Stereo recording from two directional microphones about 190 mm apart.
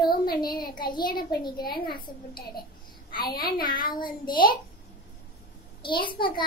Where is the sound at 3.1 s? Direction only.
50° left (ahead or behind).